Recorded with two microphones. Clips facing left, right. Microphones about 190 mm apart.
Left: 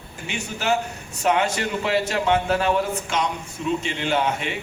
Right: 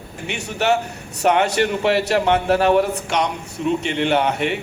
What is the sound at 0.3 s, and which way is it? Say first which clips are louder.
A man's voice: right 4 dB; 65° right (ahead or behind).